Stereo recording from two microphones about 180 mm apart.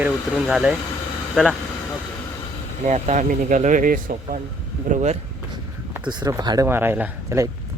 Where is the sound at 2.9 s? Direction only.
40° right (ahead or behind).